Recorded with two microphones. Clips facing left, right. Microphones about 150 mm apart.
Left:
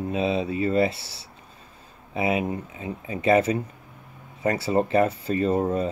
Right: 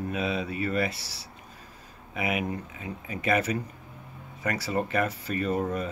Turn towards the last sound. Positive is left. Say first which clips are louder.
# left 5 dB
turn(degrees=25)  # may be behind; listen again after turning